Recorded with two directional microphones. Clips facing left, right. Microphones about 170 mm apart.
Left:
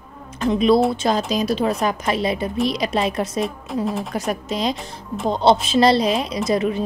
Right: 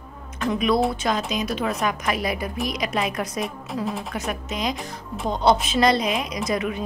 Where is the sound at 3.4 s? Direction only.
Centre (ahead or behind).